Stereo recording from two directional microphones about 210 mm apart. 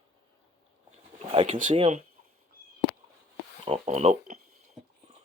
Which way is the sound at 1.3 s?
25° right (ahead or behind).